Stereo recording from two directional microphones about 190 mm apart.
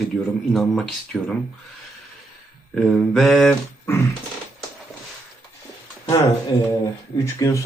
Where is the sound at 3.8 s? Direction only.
15° left (ahead or behind).